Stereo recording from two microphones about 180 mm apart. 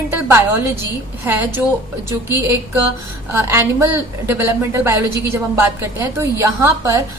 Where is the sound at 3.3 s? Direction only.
15° right (ahead or behind).